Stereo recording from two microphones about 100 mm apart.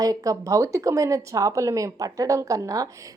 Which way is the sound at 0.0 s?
35° right (ahead or behind).